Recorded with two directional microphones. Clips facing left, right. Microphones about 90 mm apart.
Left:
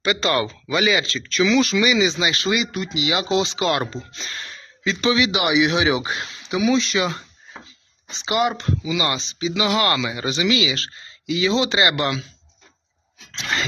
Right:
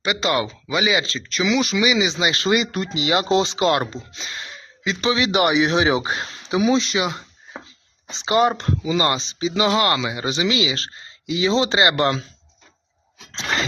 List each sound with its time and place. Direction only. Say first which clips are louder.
0.0 s speech: left 1 dB; 15° right (ahead or behind)
2.7 s speech: right 2 dB; 40° right (ahead or behind)
4.1 s speech: even; 15° right (ahead or behind)
5.3 s speech: right 1 dB; 40° right (ahead or behind)
13.3 s a sound: right 1 dB; 30° right (ahead or behind)